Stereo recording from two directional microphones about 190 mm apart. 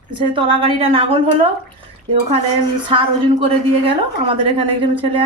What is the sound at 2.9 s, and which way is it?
A woman's voice, 25° right (ahead or behind).